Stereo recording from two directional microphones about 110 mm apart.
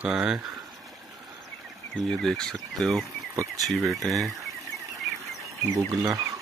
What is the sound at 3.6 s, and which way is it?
Speech, centre (ahead or behind).